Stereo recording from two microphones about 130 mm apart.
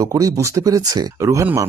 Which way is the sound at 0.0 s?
30° right (ahead or behind).